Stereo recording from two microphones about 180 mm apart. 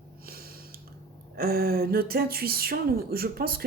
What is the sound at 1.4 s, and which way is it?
Speech, 60° right (ahead or behind).